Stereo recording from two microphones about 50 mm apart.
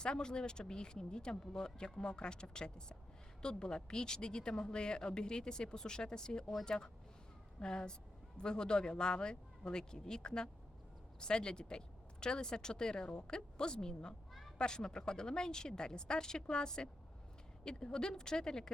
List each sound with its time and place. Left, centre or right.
0.0 s a woman's voice: centre